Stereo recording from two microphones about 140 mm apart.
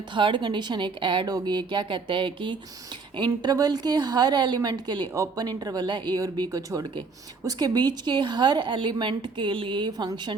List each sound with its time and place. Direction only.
0.1 s a woman's voice: 35° right (ahead or behind)